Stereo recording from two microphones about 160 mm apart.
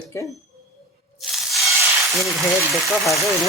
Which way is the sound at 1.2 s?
Centre (ahead or behind).